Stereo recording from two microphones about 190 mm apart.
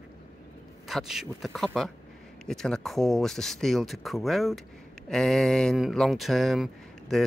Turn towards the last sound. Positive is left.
turn(degrees=0)  # may be behind; listen again after turning